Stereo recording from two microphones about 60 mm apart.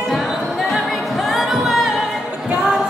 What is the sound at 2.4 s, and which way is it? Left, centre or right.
Music, centre.